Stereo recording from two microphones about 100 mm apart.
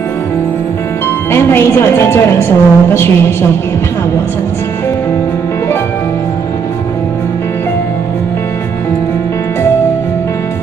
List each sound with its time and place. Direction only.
1.3 s a woman's voice: 25° left (ahead or behind)